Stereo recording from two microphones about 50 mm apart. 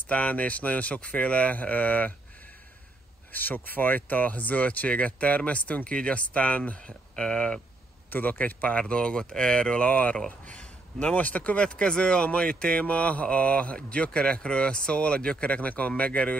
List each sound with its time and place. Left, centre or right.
0.0 s speech: left
3.3 s speech: left
6.8 s speech: centre
8.1 s speech: left
10.4 s a sound: left
11.1 s speech: left